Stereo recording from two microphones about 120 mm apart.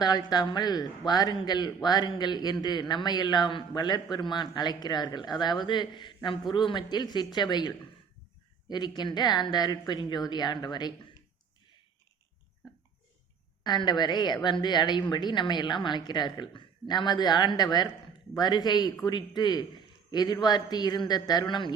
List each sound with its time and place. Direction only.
0.0 s a woman's voice: 35° left (ahead or behind)
8.7 s a woman's voice: 35° left (ahead or behind)
13.7 s a woman's voice: 35° left (ahead or behind)